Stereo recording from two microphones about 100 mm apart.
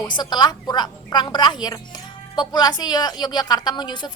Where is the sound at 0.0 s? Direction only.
45° left (ahead or behind).